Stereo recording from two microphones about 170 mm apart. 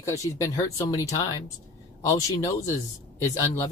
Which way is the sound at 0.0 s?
20° left (ahead or behind).